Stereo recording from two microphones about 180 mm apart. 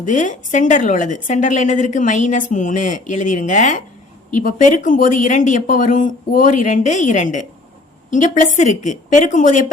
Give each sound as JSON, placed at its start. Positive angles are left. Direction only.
{"t": 0.0, "sound": "a woman's voice", "side_deg": 45}